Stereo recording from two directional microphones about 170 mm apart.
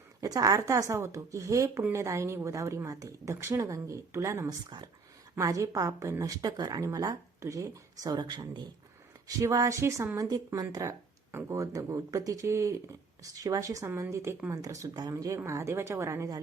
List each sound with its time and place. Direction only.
0.2 s a woman's voice: 20° right (ahead or behind)